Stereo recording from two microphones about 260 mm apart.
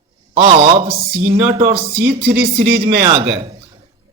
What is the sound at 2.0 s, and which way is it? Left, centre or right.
Speech, right.